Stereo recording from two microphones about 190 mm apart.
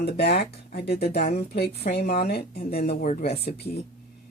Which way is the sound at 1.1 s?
40° left (ahead or behind).